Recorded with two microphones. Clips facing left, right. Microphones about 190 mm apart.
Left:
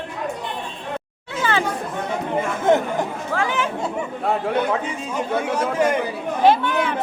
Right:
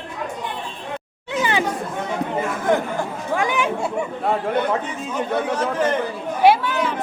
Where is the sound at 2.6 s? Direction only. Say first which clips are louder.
Left 3 dB; 25° left (ahead or behind).